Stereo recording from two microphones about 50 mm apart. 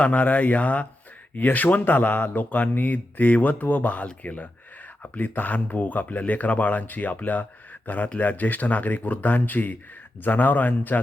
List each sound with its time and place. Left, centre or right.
0.0 s speech: left